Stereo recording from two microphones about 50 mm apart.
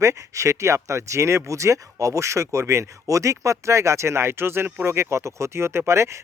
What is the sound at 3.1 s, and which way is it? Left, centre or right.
Speech, right.